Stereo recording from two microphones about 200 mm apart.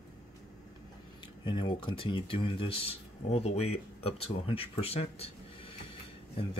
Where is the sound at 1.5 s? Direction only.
25° left (ahead or behind).